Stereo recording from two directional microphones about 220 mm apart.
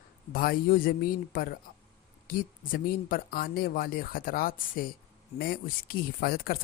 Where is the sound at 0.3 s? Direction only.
40° left (ahead or behind).